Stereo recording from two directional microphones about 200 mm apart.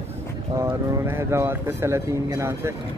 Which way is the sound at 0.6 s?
15° right (ahead or behind).